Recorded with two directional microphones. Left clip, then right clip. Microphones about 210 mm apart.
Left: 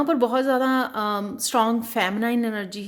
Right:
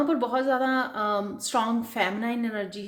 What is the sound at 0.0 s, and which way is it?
Speech, 50° left (ahead or behind).